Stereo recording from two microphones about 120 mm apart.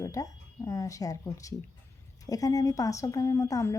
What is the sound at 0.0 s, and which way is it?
A woman's voice, 30° left (ahead or behind).